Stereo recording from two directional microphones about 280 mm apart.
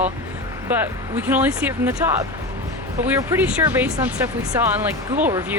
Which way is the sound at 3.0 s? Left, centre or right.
Centre.